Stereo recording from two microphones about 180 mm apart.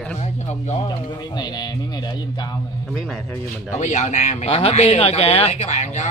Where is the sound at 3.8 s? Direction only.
40° left (ahead or behind).